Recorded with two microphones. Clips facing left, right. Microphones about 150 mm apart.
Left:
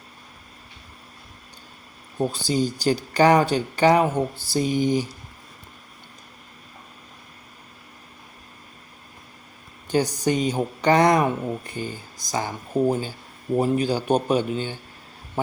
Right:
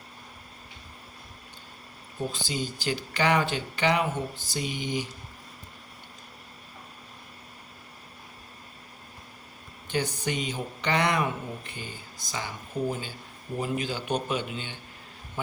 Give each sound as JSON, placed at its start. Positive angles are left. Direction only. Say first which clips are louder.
{"t": 2.1, "sound": "speech", "louder": "left 9 dB", "side_deg": 40}
{"t": 9.9, "sound": "speech", "louder": "left 8 dB", "side_deg": 40}